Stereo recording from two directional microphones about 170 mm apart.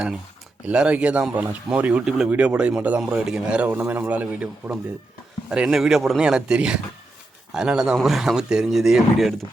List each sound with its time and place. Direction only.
0.6 s speech: 5° right (ahead or behind)